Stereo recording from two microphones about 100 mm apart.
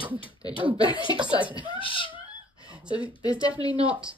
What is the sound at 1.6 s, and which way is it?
Speech, 60° left (ahead or behind).